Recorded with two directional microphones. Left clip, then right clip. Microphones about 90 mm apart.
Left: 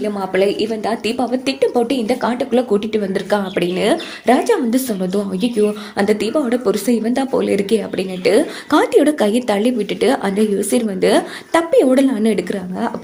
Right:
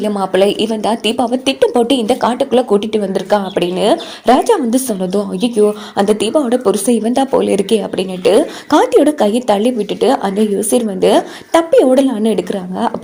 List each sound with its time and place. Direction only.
0.0 s a woman's voice: 90° right
1.3 s a woman's voice: 45° right (ahead or behind)
1.7 s a woman's voice: 65° right (ahead or behind); by 3.0 s 40° right (ahead or behind)
3.0 s a woman's voice: 25° right (ahead or behind)
4.3 s a woman's voice: 40° right (ahead or behind); by 12.5 s 25° right (ahead or behind)